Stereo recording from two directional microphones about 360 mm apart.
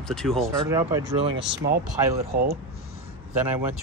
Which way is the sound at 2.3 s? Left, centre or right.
Right.